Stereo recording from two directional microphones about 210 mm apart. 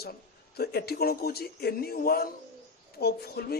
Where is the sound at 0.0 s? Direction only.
50° left (ahead or behind).